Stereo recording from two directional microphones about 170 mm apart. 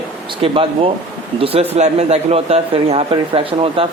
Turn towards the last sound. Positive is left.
turn(degrees=-30)  # may be behind; listen again after turning